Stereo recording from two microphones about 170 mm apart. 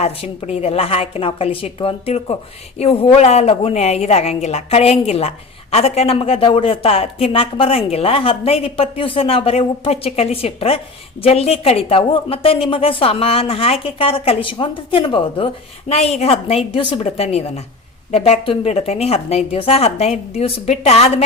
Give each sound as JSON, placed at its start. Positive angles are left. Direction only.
{"t": 0.0, "sound": "a woman's voice", "side_deg": 35}